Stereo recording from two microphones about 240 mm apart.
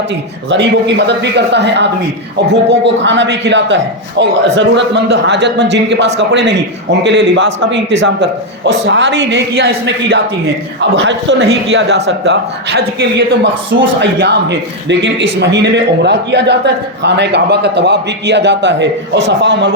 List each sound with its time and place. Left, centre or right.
0.5 s a man's voice: right